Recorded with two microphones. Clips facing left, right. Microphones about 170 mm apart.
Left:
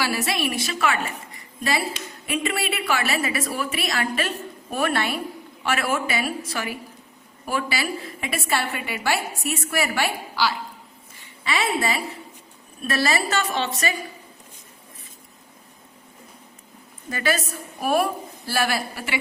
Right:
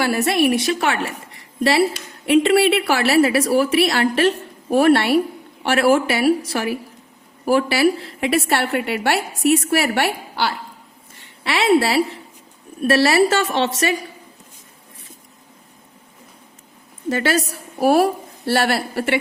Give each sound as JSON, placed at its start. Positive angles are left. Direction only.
{"t": 0.0, "sound": "a woman's voice", "side_deg": -55}
{"t": 17.1, "sound": "a woman's voice", "side_deg": -75}